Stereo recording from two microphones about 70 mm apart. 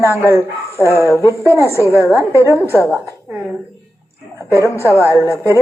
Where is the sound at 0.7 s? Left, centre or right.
Left.